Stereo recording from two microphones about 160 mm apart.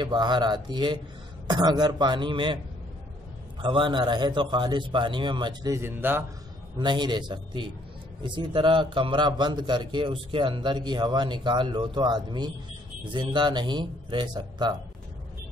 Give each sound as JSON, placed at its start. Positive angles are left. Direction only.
{"t": 0.0, "sound": "a man's voice", "side_deg": -30}
{"t": 3.6, "sound": "a man's voice", "side_deg": -30}
{"t": 6.8, "sound": "a man's voice", "side_deg": -30}